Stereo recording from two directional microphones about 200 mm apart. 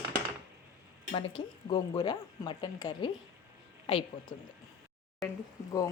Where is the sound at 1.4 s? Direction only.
20° left (ahead or behind).